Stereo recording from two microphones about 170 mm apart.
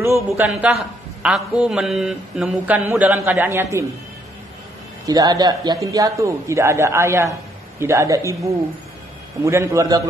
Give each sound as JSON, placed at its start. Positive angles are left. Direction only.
{"t": 0.0, "sound": "a man's voice", "side_deg": -15}
{"t": 0.5, "sound": "a man's voice", "side_deg": -5}
{"t": 5.0, "sound": "a man's voice", "side_deg": -20}